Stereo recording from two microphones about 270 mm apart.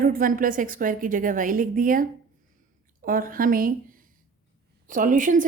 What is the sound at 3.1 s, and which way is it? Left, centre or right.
A woman's voice, right.